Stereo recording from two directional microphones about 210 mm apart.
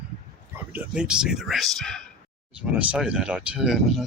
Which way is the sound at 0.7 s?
5° right (ahead or behind).